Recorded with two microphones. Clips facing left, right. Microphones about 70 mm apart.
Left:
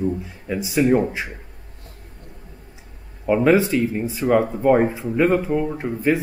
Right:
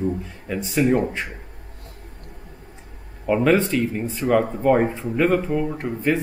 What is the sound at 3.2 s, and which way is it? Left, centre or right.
Speech, centre.